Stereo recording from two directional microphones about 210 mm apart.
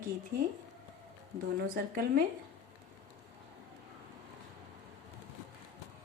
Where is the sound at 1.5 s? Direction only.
45° right (ahead or behind).